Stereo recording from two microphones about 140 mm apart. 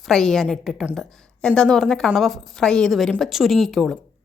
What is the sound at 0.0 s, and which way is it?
A woman's voice, 5° left (ahead or behind).